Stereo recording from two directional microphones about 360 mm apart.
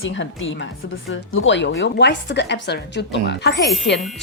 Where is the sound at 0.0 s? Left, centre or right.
Left.